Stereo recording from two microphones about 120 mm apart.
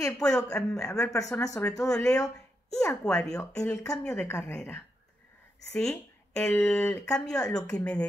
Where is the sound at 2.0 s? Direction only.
30° left (ahead or behind).